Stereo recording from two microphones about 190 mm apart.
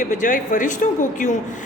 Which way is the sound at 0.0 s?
40° left (ahead or behind).